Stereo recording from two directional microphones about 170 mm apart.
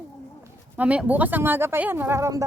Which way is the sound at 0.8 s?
10° right (ahead or behind).